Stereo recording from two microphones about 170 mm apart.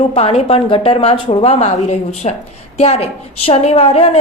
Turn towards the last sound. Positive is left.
turn(degrees=35)  # may be behind; listen again after turning